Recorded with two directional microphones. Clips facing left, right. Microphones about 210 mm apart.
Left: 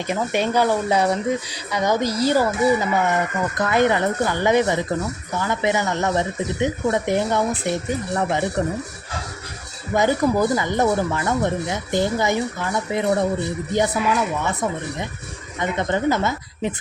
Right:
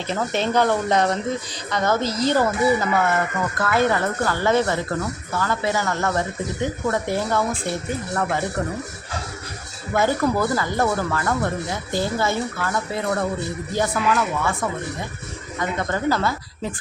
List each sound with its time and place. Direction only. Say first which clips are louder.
0.1 s speech: left 1 dB; 10° left (ahead or behind)
9.9 s speech: left 2 dB; 15° left (ahead or behind)